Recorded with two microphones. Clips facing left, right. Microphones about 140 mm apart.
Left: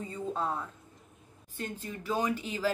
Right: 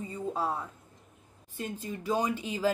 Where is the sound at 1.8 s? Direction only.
15° right (ahead or behind).